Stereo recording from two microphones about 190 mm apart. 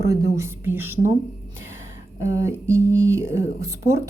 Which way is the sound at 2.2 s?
15° right (ahead or behind).